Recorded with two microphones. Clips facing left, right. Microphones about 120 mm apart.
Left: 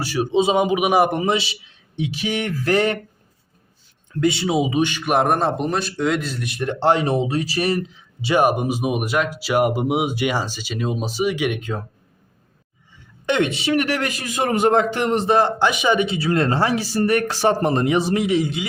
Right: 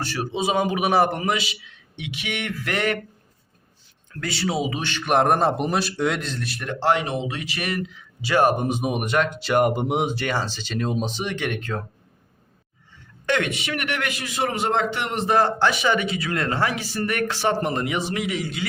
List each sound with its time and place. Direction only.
0.0 s speech: 10° left (ahead or behind)
0.3 s a man's voice: 25° left (ahead or behind)
4.1 s a man's voice: 20° left (ahead or behind)
6.4 s speech: 20° left (ahead or behind)
13.2 s speech: 25° left (ahead or behind)
15.4 s speech: 15° left (ahead or behind)